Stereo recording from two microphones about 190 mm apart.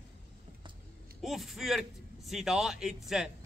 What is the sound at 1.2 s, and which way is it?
A man's voice, centre (ahead or behind).